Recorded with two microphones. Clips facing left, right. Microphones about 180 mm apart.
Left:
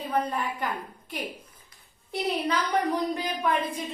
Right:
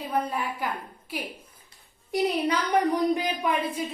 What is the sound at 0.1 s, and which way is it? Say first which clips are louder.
Speech: even; 10° right (ahead or behind).